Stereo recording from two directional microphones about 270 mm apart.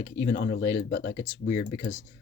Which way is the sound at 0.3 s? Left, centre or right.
Left.